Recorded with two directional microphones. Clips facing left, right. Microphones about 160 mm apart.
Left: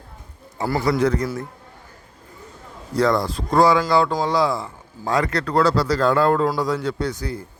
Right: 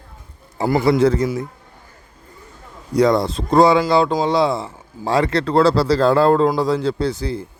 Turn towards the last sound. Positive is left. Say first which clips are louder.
# right 4 dB
turn(degrees=-30)  # may be behind; listen again after turning